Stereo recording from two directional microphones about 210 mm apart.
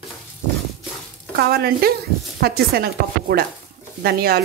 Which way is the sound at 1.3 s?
50° right (ahead or behind).